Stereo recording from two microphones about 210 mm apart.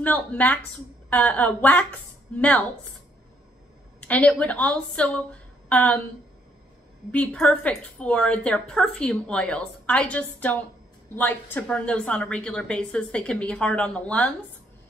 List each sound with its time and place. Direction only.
0.0 s speech: 5° left (ahead or behind)
4.0 s a woman's voice: 5° left (ahead or behind)
7.1 s a woman's voice: 5° left (ahead or behind)